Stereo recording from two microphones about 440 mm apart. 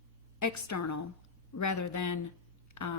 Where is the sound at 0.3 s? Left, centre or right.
Left.